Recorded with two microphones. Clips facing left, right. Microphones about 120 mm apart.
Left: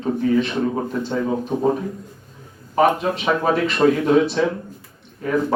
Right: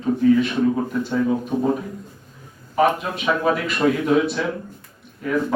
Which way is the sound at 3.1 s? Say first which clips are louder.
Left 1 dB; 30° left (ahead or behind).